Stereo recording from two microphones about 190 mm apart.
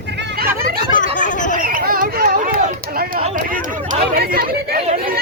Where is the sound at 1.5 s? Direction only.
50° right (ahead or behind).